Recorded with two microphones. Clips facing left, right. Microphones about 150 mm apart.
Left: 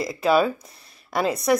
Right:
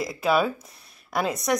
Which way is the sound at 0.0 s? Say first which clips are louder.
Left 3 dB; centre (ahead or behind).